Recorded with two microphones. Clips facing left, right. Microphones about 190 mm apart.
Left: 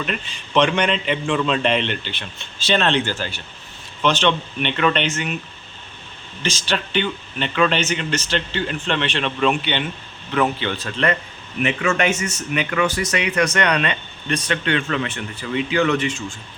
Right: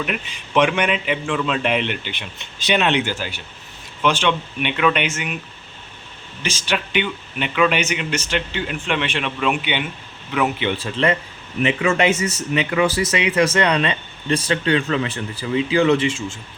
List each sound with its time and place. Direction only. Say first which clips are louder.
0.0 s speech: right 1 dB; 10° right (ahead or behind)
6.4 s speech: even; 10° right (ahead or behind)
10.7 s speech: right 2 dB; 20° right (ahead or behind)